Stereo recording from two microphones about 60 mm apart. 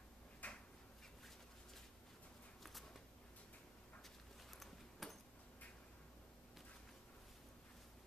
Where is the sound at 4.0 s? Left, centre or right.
Centre.